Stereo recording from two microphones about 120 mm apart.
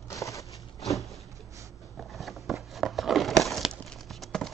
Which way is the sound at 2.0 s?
Centre (ahead or behind).